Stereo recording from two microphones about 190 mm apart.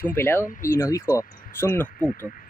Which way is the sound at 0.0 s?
10° left (ahead or behind).